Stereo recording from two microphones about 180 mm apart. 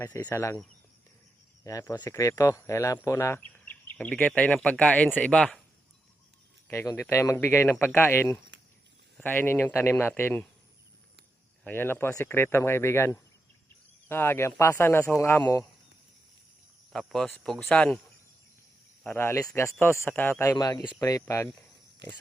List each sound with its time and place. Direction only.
0.0 s speech: 10° left (ahead or behind)
1.6 s speech: 15° left (ahead or behind)
6.7 s speech: 15° left (ahead or behind)
11.6 s speech: 10° left (ahead or behind)
16.9 s speech: 5° left (ahead or behind)
19.0 s speech: 10° left (ahead or behind)